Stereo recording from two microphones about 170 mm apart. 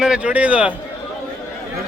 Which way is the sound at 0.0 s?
5° right (ahead or behind).